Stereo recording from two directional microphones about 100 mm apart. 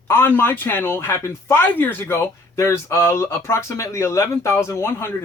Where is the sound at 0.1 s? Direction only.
25° left (ahead or behind).